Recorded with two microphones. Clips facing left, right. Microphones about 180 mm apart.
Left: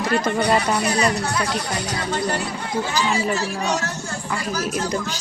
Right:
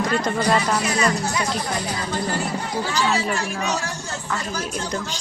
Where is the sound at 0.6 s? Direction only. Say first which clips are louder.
Left 1 dB; 65° left (ahead or behind).